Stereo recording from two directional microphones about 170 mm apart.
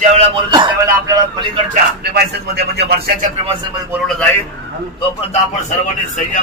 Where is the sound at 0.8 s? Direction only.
20° right (ahead or behind).